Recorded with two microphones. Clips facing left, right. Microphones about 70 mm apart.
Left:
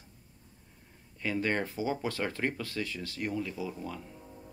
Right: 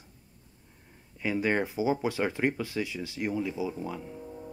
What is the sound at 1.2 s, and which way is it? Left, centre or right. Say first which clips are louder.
Speech: right 3 dB; centre.